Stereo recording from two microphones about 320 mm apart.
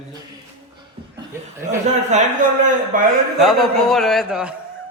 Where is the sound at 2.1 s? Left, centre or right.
Right.